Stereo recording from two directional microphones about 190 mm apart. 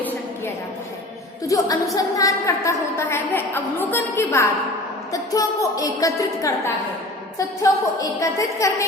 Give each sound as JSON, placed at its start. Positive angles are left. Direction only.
{"t": 1.5, "sound": "a woman's voice", "side_deg": 20}